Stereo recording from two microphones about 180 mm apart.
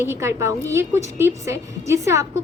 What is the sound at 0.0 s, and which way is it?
A woman's voice, 15° right (ahead or behind).